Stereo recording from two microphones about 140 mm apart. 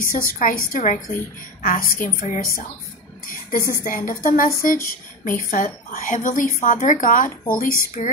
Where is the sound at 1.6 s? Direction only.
90° left.